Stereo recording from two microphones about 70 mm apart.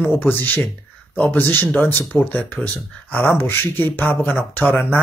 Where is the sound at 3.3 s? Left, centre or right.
Left.